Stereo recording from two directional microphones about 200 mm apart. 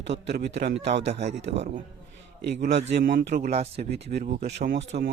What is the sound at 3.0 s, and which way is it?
Speech, 55° right (ahead or behind).